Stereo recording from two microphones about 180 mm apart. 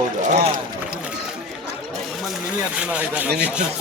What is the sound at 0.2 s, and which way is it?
Run, 40° right (ahead or behind).